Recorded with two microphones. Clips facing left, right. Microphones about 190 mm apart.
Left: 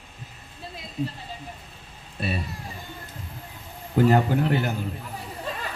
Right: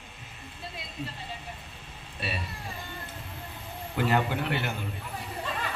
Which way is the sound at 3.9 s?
40° left (ahead or behind).